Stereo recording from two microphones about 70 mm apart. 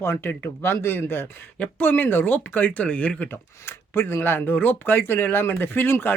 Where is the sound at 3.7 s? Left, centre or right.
Left.